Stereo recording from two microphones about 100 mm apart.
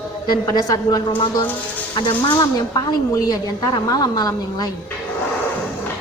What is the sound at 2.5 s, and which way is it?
A man's voice, 40° left (ahead or behind).